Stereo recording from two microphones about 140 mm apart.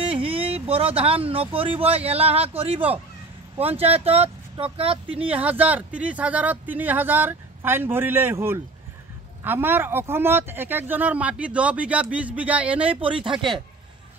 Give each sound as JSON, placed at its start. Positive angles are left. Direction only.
{"t": 0.0, "sound": "speech", "side_deg": -40}
{"t": 5.2, "sound": "speech", "side_deg": -10}
{"t": 12.9, "sound": "speech", "side_deg": -40}